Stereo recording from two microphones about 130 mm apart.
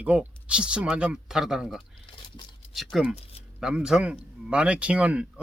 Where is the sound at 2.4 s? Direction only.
35° left (ahead or behind).